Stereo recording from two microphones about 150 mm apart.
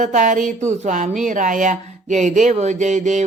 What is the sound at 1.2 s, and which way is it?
Speech, 60° right (ahead or behind).